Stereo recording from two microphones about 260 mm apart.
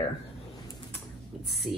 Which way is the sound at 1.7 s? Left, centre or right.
Centre.